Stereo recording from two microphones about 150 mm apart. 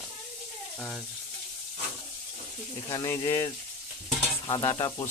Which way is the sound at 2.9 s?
25° left (ahead or behind).